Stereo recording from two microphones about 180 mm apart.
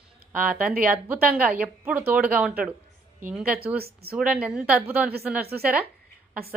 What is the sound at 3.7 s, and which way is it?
Speech, 60° right (ahead or behind).